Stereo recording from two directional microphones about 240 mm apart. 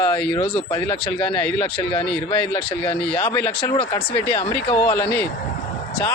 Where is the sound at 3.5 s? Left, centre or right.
Left.